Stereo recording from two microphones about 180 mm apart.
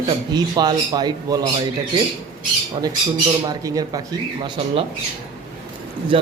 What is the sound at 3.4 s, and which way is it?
Speech, 20° right (ahead or behind).